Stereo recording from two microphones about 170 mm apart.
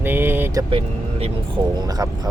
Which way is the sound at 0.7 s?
35° right (ahead or behind).